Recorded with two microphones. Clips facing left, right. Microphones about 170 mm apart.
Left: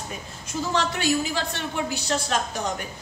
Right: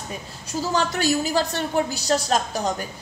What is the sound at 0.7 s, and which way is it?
A woman's voice, 40° right (ahead or behind).